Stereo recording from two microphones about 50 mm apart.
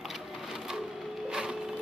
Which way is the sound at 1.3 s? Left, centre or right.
Centre.